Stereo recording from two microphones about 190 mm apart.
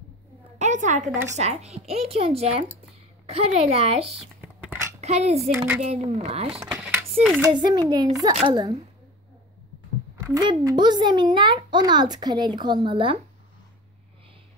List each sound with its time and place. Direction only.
0.6 s speech: 40° right (ahead or behind)
4.4 s whispering: 10° right (ahead or behind)
5.0 s speech: 35° right (ahead or behind)
6.6 s a sound: 15° right (ahead or behind)
7.5 s a child's voice: 20° right (ahead or behind)
10.1 s a child's voice: 15° right (ahead or behind)